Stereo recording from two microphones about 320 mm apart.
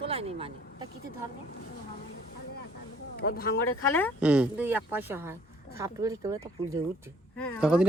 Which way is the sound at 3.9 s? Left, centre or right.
Centre.